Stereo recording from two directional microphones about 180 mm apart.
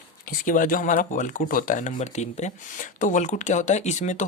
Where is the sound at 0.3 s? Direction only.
45° left (ahead or behind).